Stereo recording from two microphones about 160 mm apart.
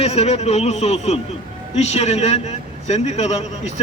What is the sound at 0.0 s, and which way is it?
A man's voice, 40° left (ahead or behind).